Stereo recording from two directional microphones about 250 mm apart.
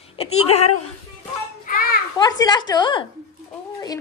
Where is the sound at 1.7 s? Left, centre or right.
Left.